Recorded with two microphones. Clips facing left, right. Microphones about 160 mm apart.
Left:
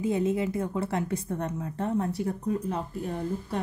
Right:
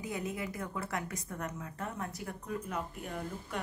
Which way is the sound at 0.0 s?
25° left (ahead or behind).